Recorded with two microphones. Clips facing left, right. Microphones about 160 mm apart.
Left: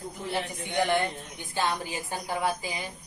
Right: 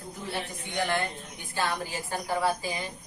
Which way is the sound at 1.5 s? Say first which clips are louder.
Left 1 dB; 20° left (ahead or behind).